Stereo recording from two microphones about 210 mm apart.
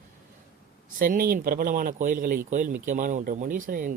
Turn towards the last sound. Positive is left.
turn(degrees=-40)  # may be behind; listen again after turning